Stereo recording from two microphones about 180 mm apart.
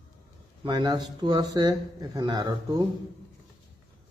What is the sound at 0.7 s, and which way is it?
Speech, 25° right (ahead or behind).